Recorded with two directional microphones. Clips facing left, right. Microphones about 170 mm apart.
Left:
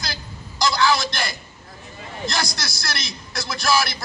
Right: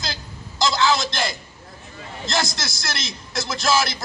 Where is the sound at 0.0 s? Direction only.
20° right (ahead or behind).